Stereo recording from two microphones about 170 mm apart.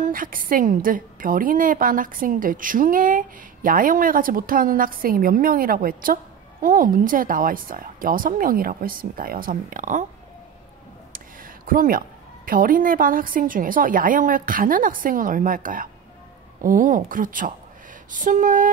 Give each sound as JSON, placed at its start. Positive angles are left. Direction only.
{"t": 0.0, "sound": "a woman's voice", "side_deg": -55}
{"t": 11.1, "sound": "a sound", "side_deg": -55}
{"t": 12.4, "sound": "a woman's voice", "side_deg": -55}